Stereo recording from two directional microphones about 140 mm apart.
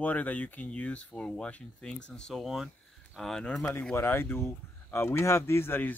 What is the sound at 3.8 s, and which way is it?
Speech, 15° left (ahead or behind).